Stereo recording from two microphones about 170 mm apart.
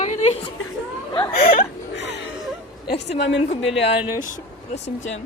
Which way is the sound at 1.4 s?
65° left (ahead or behind).